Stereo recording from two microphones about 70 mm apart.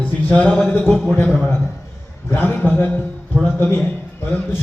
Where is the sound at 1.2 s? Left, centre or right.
Left.